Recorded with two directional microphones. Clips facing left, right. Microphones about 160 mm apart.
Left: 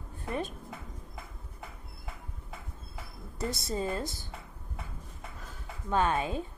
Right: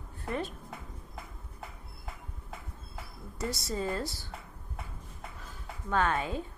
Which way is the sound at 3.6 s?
20° left (ahead or behind).